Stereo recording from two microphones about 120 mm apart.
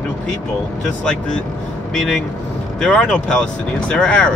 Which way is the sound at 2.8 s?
10° left (ahead or behind).